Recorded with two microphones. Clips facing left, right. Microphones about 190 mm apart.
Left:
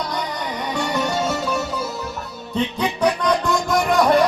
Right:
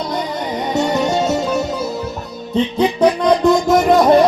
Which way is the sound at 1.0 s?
25° right (ahead or behind).